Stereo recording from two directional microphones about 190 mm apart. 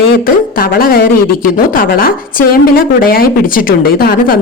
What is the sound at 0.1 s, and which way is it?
A woman's voice, 50° left (ahead or behind).